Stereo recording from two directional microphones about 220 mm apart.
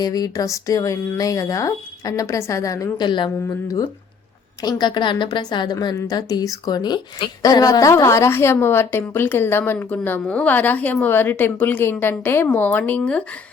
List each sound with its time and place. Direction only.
0.0 s a woman's voice: 15° left (ahead or behind)